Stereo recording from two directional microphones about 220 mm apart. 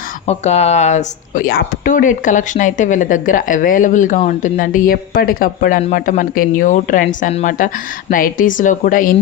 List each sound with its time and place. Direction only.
0.3 s speech: 30° left (ahead or behind)